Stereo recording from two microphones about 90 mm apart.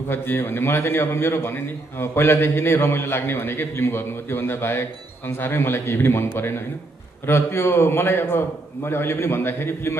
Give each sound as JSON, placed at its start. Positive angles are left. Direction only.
{"t": 0.1, "sound": "a man's voice", "side_deg": 25}